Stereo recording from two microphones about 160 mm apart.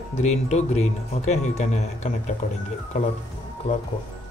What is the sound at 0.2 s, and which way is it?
Speech, 45° left (ahead or behind).